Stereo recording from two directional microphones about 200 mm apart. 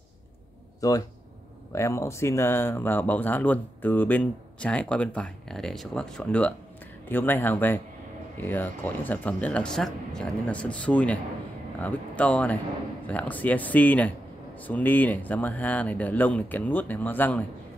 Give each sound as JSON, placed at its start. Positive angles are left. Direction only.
{"t": 0.7, "sound": "speech", "side_deg": 15}